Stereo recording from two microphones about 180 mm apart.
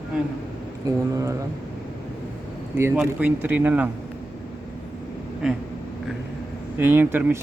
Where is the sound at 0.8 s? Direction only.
20° right (ahead or behind).